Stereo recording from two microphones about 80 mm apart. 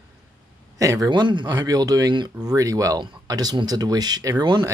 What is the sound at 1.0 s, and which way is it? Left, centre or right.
Speech, right.